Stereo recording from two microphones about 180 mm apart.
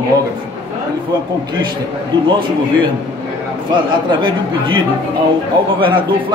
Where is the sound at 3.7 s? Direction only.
25° right (ahead or behind).